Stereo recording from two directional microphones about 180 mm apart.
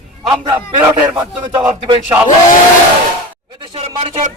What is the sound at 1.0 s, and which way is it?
Speech, 15° right (ahead or behind).